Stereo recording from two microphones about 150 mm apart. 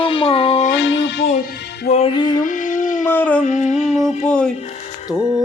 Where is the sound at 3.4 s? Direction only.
55° left (ahead or behind).